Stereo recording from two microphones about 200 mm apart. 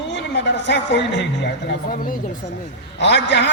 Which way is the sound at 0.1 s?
60° left (ahead or behind).